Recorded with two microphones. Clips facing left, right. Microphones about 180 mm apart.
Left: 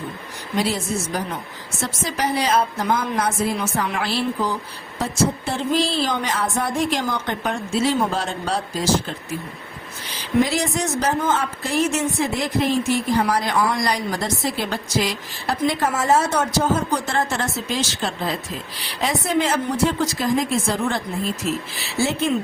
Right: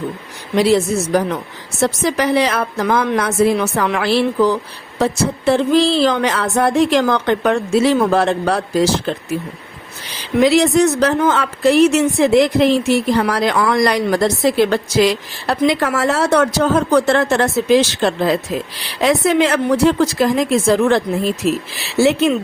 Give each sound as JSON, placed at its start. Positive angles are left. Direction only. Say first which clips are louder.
{"t": 0.5, "sound": "a woman's voice", "louder": "right 9 dB", "side_deg": -70}
{"t": 10.4, "sound": "a woman's voice", "louder": "right 10 dB", "side_deg": -70}